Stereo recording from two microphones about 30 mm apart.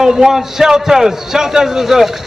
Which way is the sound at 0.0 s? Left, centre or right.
Centre.